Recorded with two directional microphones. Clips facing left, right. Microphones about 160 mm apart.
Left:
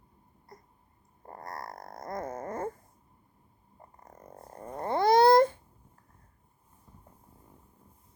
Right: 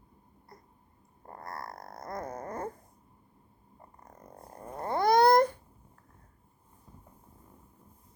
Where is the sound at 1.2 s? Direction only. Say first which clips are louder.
Left 1 dB; 25° left (ahead or behind).